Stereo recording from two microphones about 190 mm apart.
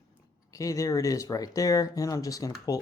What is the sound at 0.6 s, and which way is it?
Speech, 15° left (ahead or behind).